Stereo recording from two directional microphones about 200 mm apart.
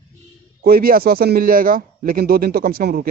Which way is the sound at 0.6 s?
45° right (ahead or behind).